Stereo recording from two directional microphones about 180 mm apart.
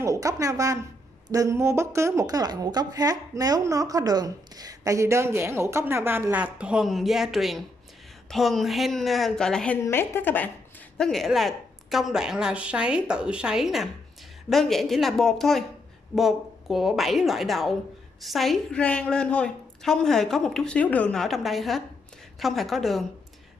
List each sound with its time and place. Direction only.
0.0 s a woman's voice: 20° right (ahead or behind); by 23.0 s centre (ahead or behind)